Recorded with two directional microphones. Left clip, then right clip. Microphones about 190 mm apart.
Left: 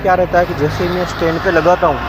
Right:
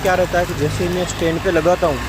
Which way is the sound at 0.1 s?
10° right (ahead or behind).